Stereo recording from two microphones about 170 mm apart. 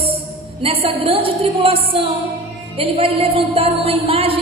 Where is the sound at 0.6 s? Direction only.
35° right (ahead or behind).